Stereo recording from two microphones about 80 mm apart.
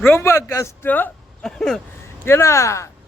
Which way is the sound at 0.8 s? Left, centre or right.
Left.